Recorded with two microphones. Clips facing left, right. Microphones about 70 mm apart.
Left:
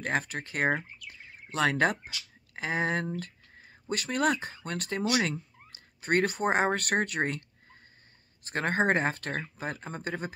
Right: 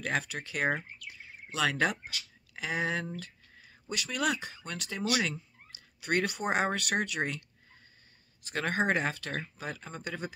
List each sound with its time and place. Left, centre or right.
0.0 s speech: left
1.0 s bird: left
2.5 s speech: left
8.5 s speech: left